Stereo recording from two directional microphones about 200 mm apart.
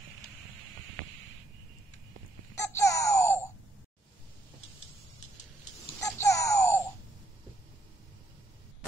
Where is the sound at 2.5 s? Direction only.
15° left (ahead or behind).